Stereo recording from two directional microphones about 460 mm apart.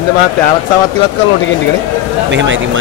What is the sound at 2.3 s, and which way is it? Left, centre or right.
Speech, right.